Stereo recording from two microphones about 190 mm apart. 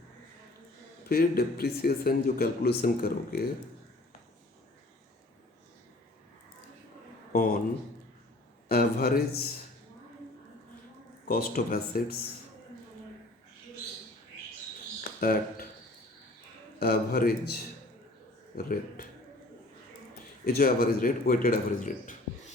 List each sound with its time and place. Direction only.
1.0 s speech: 50° left (ahead or behind)
7.3 s speech: 45° left (ahead or behind)
8.7 s speech: 50° left (ahead or behind)
11.3 s speech: 50° left (ahead or behind)
15.2 s speech: 50° left (ahead or behind)
16.8 s speech: 50° left (ahead or behind)
18.5 s speech: 50° left (ahead or behind)
20.4 s speech: 50° left (ahead or behind)